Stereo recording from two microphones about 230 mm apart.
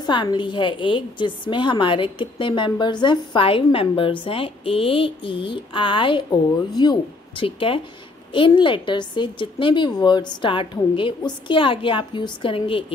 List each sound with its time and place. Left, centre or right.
0.0 s a woman's voice: centre